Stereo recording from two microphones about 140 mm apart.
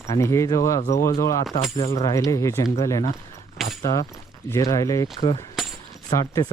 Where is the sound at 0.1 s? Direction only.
20° left (ahead or behind).